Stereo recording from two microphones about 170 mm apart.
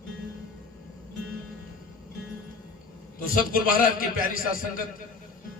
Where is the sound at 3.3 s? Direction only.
55° left (ahead or behind).